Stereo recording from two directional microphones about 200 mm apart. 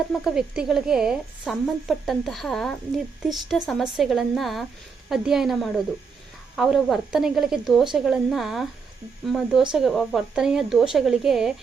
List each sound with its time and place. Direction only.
0.1 s a woman's voice: 5° right (ahead or behind)